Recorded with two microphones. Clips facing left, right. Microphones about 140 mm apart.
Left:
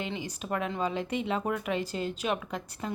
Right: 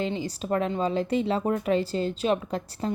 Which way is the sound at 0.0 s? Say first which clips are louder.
Right 6 dB; 35° right (ahead or behind).